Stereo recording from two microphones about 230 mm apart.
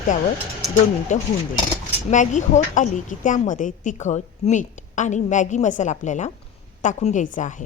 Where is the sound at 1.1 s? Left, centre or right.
Left.